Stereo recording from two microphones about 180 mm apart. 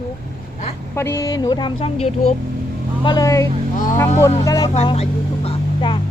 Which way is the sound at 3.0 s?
20° left (ahead or behind).